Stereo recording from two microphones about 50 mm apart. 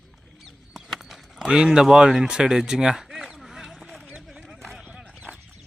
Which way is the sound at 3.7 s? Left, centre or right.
Centre.